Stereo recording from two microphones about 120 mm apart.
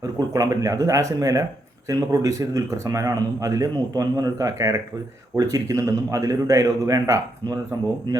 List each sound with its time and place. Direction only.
0.0 s speech: 30° right (ahead or behind)